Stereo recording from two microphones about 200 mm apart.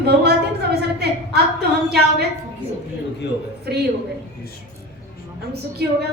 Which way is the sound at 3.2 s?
60° left (ahead or behind).